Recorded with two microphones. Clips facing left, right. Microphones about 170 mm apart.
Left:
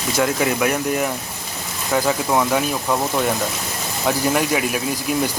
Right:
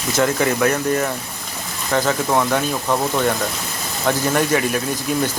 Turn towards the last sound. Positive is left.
turn(degrees=5)  # may be behind; listen again after turning